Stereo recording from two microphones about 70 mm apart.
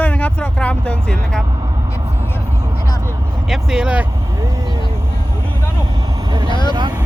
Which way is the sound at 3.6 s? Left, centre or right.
Centre.